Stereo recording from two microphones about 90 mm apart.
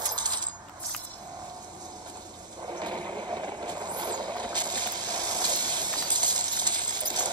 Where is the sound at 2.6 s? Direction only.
55° right (ahead or behind).